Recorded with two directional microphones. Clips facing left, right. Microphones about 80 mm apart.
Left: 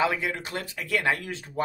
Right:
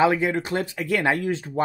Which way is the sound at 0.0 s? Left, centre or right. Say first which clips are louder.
Right 6 dB; right.